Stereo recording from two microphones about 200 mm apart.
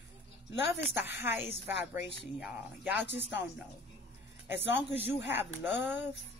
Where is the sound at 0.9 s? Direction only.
10° right (ahead or behind).